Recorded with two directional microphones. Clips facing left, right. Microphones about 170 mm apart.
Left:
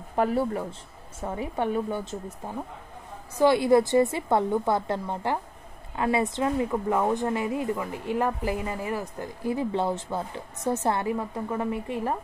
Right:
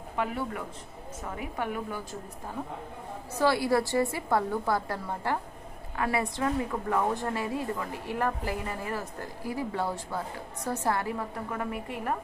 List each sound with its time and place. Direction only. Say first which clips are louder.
0.1 s speech: left 7 dB; 40° left (ahead or behind)
3.3 s speech: left 6 dB; 20° left (ahead or behind)